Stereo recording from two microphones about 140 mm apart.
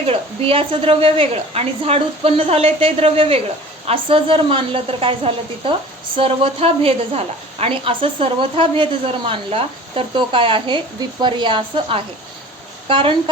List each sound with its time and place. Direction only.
0.0 s a woman's voice: 40° right (ahead or behind)